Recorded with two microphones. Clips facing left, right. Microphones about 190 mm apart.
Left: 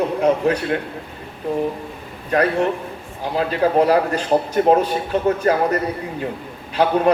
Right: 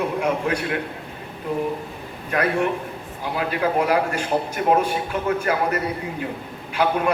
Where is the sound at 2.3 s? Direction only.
35° left (ahead or behind).